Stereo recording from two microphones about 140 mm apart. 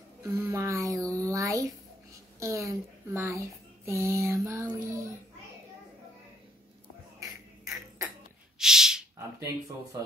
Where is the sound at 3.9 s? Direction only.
20° right (ahead or behind).